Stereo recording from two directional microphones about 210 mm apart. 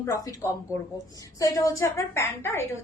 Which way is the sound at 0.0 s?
15° left (ahead or behind).